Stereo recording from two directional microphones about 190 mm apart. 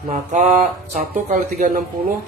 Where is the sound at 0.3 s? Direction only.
40° right (ahead or behind).